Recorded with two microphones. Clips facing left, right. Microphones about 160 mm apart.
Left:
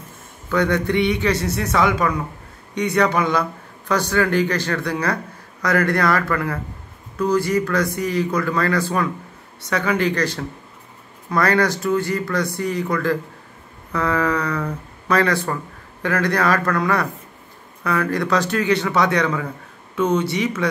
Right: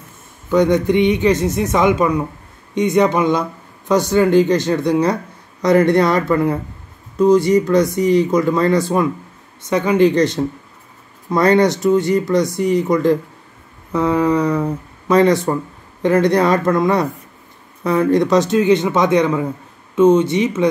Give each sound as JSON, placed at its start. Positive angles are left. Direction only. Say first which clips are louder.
{"t": 0.5, "sound": "a man's voice", "louder": "right 6 dB", "side_deg": -15}